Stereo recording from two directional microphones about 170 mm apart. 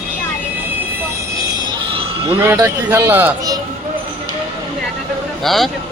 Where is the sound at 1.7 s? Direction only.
30° right (ahead or behind).